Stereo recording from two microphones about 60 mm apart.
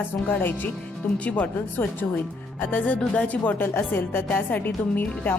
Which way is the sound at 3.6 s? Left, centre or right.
Left.